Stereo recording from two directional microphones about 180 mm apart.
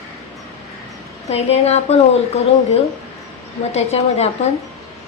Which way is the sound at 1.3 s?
35° left (ahead or behind).